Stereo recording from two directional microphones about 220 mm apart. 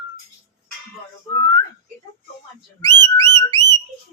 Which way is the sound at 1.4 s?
15° left (ahead or behind).